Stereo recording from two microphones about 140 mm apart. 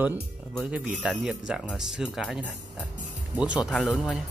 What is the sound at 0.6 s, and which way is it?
Speech, 10° right (ahead or behind).